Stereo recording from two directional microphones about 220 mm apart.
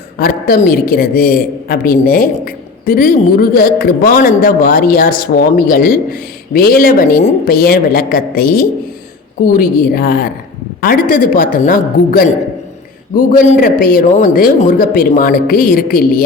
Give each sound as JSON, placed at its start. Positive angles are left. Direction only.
{"t": 0.2, "sound": "a woman's voice", "side_deg": 40}